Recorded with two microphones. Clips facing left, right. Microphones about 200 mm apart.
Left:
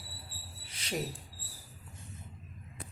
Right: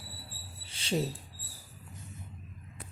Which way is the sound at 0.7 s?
30° right (ahead or behind).